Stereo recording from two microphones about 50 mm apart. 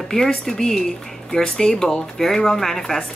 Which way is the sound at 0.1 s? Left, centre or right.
Centre.